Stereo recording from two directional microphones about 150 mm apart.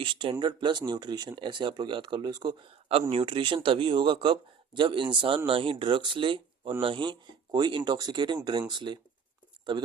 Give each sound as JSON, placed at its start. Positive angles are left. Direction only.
{"t": 0.0, "sound": "speech", "side_deg": -35}